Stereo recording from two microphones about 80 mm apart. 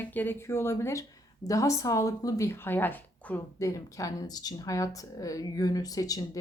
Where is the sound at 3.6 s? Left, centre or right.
Left.